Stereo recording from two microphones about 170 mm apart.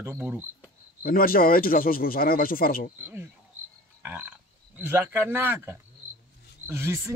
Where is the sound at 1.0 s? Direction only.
60° left (ahead or behind).